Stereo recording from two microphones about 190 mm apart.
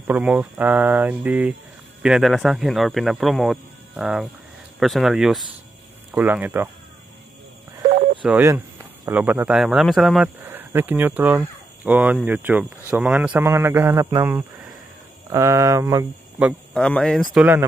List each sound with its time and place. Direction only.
0.0 s speech: 10° right (ahead or behind)
8.2 s speech: 10° right (ahead or behind)
16.4 s speech: 5° left (ahead or behind)